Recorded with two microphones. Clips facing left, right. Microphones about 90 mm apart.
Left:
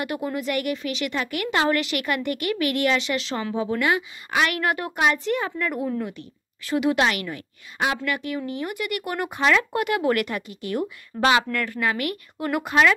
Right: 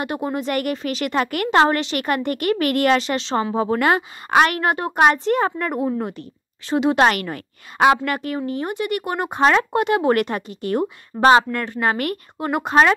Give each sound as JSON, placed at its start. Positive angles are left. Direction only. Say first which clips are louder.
{"t": 0.0, "sound": "a woman's voice", "louder": "right 3 dB", "side_deg": -30}
{"t": 3.5, "sound": "speech", "louder": "right 3 dB", "side_deg": -45}
{"t": 4.6, "sound": "a woman's voice", "louder": "right 6 dB", "side_deg": -30}
{"t": 6.6, "sound": "a woman's voice", "louder": "right 3 dB", "side_deg": -30}
{"t": 7.0, "sound": "a woman's voice", "louder": "right 6 dB", "side_deg": -45}
{"t": 11.9, "sound": "a woman's voice", "louder": "right 4 dB", "side_deg": -40}